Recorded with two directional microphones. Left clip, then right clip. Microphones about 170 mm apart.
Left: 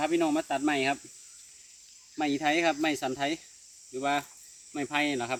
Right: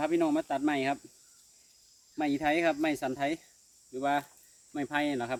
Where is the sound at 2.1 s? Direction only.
20° right (ahead or behind).